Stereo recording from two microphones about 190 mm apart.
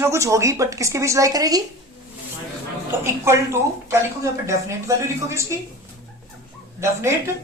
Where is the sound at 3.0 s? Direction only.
15° right (ahead or behind).